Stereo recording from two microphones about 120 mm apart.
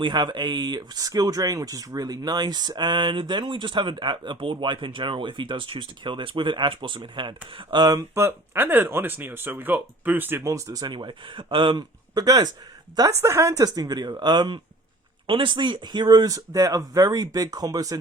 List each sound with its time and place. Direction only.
0.0 s speech: 40° right (ahead or behind)